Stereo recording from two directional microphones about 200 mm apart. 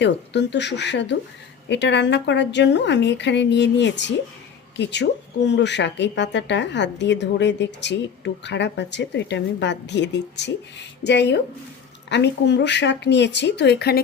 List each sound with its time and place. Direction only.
0.0 s speech: 60° left (ahead or behind)